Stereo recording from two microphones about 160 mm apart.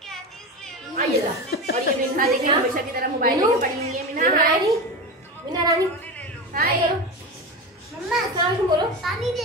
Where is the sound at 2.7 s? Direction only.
70° right (ahead or behind).